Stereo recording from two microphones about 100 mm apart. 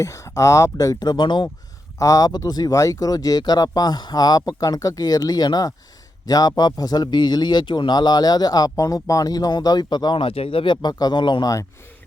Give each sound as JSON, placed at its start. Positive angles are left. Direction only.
{"t": 0.0, "sound": "speech", "side_deg": 30}
{"t": 2.0, "sound": "a man's voice", "side_deg": 35}
{"t": 10.8, "sound": "a man's voice", "side_deg": 45}